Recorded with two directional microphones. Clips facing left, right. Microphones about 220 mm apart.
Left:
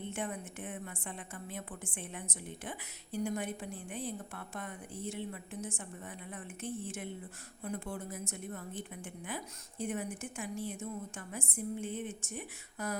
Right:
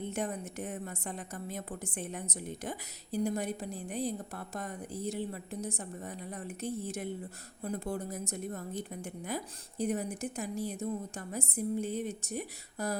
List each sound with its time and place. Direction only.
0.1 s a woman's voice: 40° right (ahead or behind)